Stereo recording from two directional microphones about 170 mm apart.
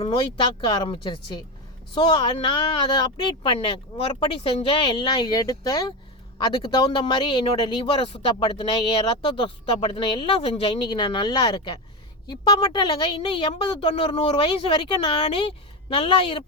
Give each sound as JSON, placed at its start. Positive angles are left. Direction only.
{"t": 0.0, "sound": "speech", "side_deg": 30}